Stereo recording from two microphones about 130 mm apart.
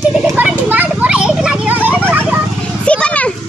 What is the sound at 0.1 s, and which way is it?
Children playing, 5° right (ahead or behind).